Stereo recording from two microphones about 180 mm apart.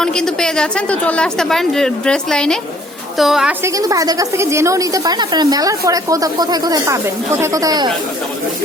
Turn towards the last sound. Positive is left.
turn(degrees=-20)  # may be behind; listen again after turning